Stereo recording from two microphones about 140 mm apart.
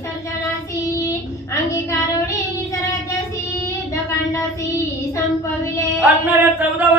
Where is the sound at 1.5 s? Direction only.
20° left (ahead or behind).